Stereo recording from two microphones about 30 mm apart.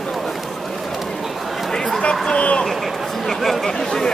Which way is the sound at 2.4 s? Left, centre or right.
Left.